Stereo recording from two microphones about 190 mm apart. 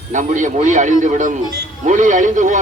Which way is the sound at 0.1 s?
40° right (ahead or behind).